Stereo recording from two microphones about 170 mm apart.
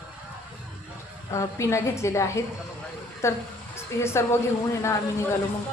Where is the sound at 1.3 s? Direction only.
15° left (ahead or behind).